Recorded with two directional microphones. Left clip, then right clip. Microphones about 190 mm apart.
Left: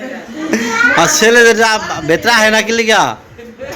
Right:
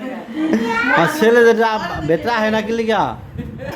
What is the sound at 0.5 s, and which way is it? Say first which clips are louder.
Speech: left 5 dB; 15° right (ahead or behind).